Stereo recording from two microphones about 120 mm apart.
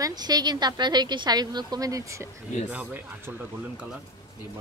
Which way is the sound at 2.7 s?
15° right (ahead or behind).